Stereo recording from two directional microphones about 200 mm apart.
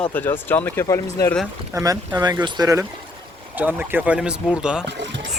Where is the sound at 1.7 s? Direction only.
20° right (ahead or behind).